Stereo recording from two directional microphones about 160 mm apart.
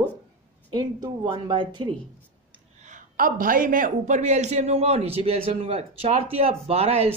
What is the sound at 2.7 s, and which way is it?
A man's voice, 50° right (ahead or behind).